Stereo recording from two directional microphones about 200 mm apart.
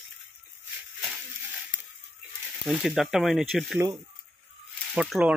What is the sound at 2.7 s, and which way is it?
Speech, centre (ahead or behind).